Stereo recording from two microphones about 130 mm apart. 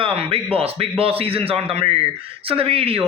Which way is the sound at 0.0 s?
45° right (ahead or behind).